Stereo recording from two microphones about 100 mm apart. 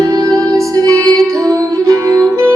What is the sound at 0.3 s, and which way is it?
Music, 30° right (ahead or behind).